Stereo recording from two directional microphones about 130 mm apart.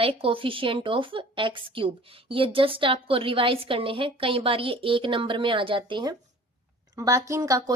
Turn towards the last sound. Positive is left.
turn(degrees=-25)  # may be behind; listen again after turning